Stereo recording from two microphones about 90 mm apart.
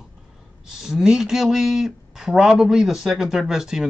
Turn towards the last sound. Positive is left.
turn(degrees=-5)  # may be behind; listen again after turning